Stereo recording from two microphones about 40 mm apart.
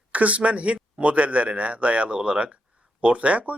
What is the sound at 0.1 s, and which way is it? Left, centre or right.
Speech, right.